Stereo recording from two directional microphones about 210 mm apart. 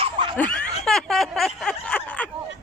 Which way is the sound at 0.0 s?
25° right (ahead or behind).